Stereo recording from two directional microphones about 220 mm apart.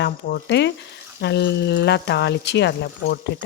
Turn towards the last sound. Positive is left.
turn(degrees=50)  # may be behind; listen again after turning